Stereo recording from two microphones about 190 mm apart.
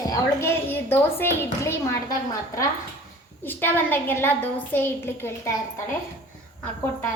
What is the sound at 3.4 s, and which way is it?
A woman's voice, 10° left (ahead or behind).